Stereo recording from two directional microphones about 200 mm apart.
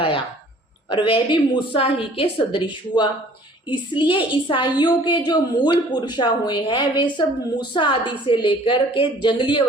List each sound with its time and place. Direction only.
0.9 s a woman's voice: 25° left (ahead or behind)